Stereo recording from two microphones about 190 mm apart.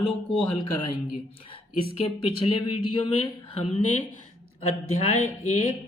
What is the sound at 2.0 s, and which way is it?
Speech, 30° left (ahead or behind).